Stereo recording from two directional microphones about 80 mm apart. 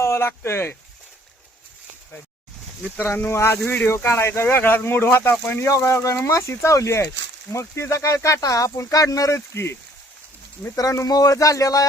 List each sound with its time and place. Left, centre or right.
0.0 s speech: left
3.0 s speech: left
10.8 s speech: left